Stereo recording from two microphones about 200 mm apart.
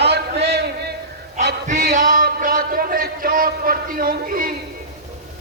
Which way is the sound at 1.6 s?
40° right (ahead or behind).